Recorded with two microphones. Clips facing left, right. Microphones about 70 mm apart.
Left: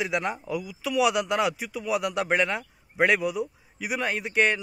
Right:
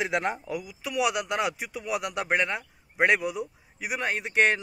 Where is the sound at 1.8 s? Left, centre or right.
Centre.